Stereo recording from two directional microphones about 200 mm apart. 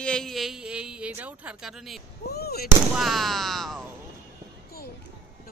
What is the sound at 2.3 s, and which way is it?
Fireworks, 50° left (ahead or behind).